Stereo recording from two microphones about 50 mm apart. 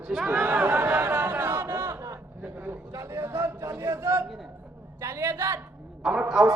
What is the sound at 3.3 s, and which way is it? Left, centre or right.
Speech, right.